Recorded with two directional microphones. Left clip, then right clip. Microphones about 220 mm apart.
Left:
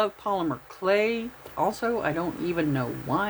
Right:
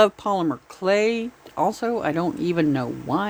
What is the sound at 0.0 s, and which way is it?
Speech, 40° right (ahead or behind).